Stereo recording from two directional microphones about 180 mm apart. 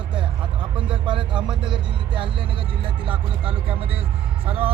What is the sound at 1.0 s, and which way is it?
Speech, 25° right (ahead or behind).